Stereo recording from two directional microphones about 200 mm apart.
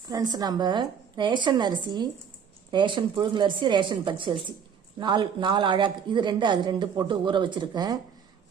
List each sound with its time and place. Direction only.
0.1 s speech: 20° right (ahead or behind)